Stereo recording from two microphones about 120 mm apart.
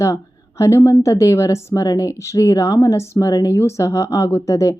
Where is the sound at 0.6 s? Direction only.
25° left (ahead or behind).